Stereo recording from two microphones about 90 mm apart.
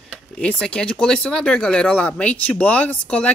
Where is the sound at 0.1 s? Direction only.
10° left (ahead or behind).